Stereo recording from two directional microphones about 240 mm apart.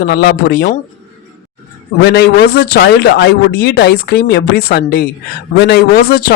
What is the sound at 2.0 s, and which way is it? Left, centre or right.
Speech, left.